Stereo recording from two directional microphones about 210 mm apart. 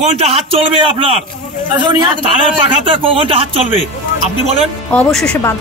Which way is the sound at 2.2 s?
25° right (ahead or behind).